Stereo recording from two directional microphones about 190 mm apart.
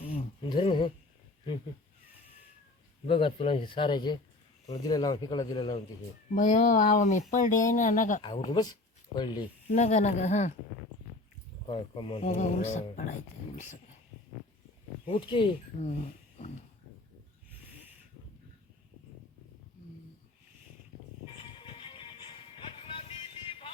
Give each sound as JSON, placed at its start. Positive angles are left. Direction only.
{"t": 0.0, "sound": "a sound", "side_deg": 30}
{"t": 3.1, "sound": "speech", "side_deg": 30}
{"t": 6.3, "sound": "speech", "side_deg": 40}
{"t": 8.2, "sound": "speech", "side_deg": 25}
{"t": 9.6, "sound": "speech", "side_deg": 40}
{"t": 11.7, "sound": "speech", "side_deg": 25}
{"t": 12.3, "sound": "speech", "side_deg": 40}
{"t": 15.0, "sound": "speech", "side_deg": 25}
{"t": 15.9, "sound": "speech", "side_deg": 40}
{"t": 21.6, "sound": "music", "side_deg": 25}